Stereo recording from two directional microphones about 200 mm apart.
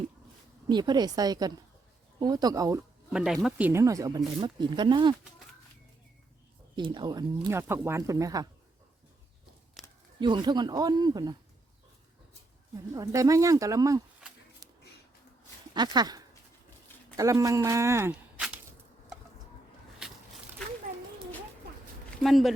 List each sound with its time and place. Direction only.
0.7 s speech: 20° right (ahead or behind)
3.1 s speech: 5° right (ahead or behind); by 5.1 s 20° right (ahead or behind)
6.7 s speech: 25° right (ahead or behind)
9.8 s a sound: centre (ahead or behind)
10.2 s speech: 25° right (ahead or behind)
12.9 s speech: 15° right (ahead or behind)
14.6 s a sound: 20° right (ahead or behind)
15.7 s speech: 20° right (ahead or behind)
20.9 s a sound: 45° right (ahead or behind)
22.2 s speech: centre (ahead or behind)